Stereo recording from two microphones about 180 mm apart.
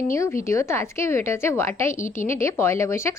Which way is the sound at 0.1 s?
15° left (ahead or behind).